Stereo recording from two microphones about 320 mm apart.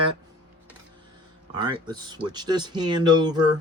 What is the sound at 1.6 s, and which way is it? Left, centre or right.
Speech, centre.